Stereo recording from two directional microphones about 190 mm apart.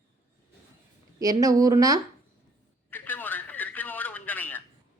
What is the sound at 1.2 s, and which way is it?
Speech, 20° right (ahead or behind).